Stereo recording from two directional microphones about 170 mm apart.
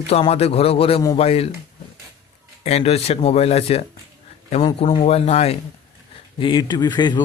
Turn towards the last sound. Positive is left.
turn(degrees=25)  # may be behind; listen again after turning